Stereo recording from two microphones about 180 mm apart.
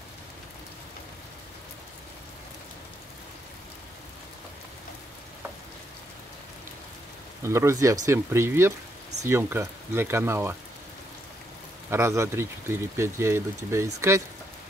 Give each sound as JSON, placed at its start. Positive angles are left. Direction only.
{"t": 7.4, "sound": "speech", "side_deg": -15}
{"t": 11.9, "sound": "speech", "side_deg": -15}